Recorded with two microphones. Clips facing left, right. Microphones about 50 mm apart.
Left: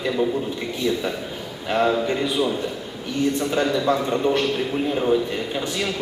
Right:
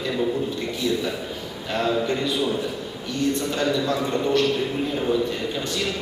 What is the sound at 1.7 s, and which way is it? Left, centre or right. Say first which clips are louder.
Speech: left 3 dB; centre.